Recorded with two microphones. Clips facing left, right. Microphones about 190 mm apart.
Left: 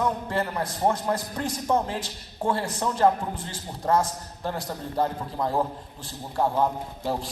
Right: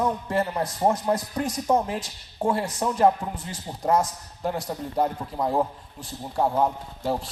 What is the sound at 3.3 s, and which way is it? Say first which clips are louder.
Speech: even; 30° left (ahead or behind).